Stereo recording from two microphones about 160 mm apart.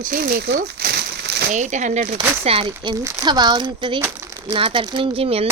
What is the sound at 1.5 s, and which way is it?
Speech, 50° right (ahead or behind).